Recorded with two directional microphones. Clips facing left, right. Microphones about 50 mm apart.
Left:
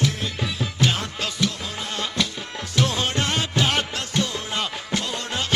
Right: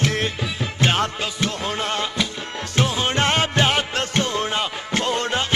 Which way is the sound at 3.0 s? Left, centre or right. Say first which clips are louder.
Right 5 dB; right.